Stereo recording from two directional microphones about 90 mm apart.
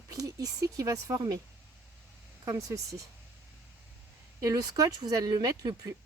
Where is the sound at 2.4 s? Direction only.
35° right (ahead or behind).